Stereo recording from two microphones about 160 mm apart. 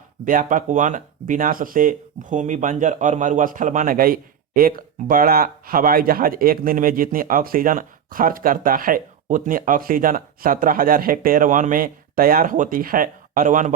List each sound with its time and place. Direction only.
0.3 s speech: 55° right (ahead or behind)